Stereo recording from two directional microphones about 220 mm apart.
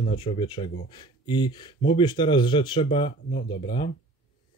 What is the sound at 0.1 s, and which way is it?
Speech, 20° left (ahead or behind).